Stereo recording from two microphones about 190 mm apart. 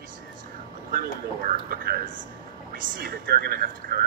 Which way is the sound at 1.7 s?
50° right (ahead or behind).